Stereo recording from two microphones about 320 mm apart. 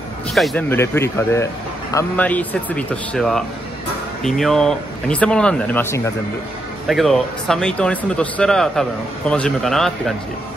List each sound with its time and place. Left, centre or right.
0.3 s a man's voice: centre